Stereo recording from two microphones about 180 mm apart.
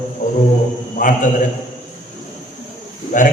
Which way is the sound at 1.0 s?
50° left (ahead or behind).